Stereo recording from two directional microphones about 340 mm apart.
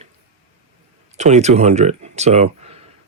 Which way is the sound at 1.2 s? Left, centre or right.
Centre.